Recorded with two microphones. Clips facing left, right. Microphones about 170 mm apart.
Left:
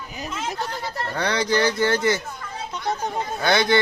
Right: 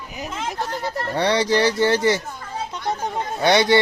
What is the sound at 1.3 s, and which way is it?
Speech, 35° right (ahead or behind).